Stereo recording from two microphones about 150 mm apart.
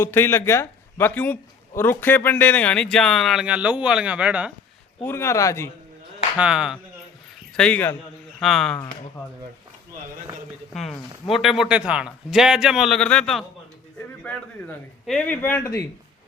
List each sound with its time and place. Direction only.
0.0 s speech: 15° left (ahead or behind); by 4.5 s 10° right (ahead or behind)
5.0 s speech: 15° left (ahead or behind)
6.3 s speech: 5° right (ahead or behind)
7.5 s a man's voice: 5° left (ahead or behind)
8.4 s speech: centre (ahead or behind)
10.8 s speech: centre (ahead or behind); by 15.9 s 20° left (ahead or behind)